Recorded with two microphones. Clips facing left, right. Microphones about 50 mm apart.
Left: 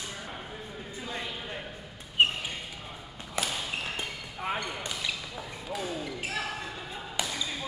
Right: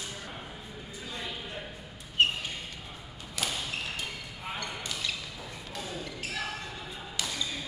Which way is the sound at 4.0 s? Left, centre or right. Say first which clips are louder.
Left 3 dB; left.